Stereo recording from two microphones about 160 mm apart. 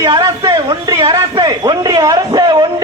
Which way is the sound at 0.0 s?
25° right (ahead or behind).